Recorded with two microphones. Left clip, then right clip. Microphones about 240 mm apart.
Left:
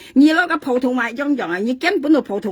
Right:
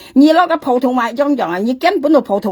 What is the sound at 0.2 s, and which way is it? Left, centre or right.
Speech, centre.